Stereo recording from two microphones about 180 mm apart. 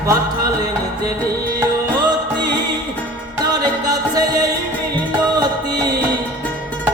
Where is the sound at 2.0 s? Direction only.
25° right (ahead or behind).